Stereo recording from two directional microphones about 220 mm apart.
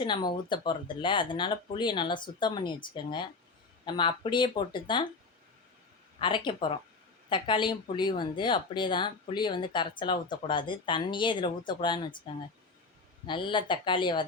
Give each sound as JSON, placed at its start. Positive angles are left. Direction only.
{"t": 0.0, "sound": "speech", "side_deg": 20}
{"t": 6.1, "sound": "speech", "side_deg": 20}